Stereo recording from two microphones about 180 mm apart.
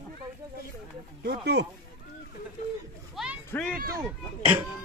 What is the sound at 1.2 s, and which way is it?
Speech, 65° right (ahead or behind).